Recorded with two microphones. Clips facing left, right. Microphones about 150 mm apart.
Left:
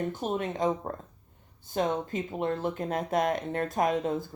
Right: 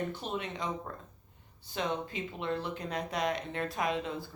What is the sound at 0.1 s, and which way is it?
Speech, 45° left (ahead or behind).